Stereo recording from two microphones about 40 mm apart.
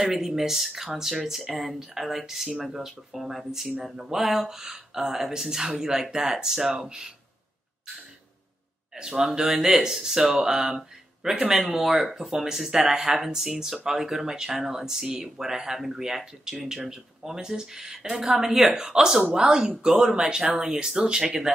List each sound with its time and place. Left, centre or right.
0.0 s speech: centre
8.9 s speech: centre